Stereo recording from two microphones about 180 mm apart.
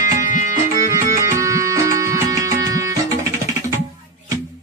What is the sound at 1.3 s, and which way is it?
Music, 15° right (ahead or behind).